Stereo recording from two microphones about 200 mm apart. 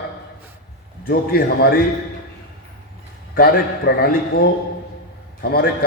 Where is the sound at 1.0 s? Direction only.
50° left (ahead or behind).